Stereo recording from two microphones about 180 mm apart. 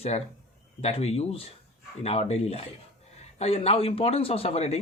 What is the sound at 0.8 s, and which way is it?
A man's voice, 35° left (ahead or behind).